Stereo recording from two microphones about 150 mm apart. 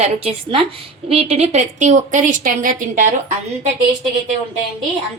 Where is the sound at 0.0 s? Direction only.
40° right (ahead or behind); by 3.0 s 65° right (ahead or behind).